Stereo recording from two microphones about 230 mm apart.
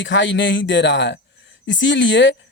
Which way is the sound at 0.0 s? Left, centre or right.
Left.